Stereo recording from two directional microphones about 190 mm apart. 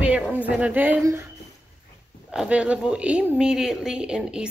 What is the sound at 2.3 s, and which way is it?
Speech, 5° right (ahead or behind).